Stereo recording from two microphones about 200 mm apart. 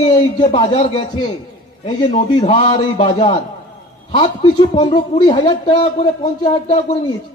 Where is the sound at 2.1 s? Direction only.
35° left (ahead or behind).